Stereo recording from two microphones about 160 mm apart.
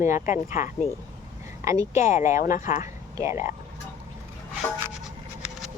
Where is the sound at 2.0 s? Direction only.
55° left (ahead or behind).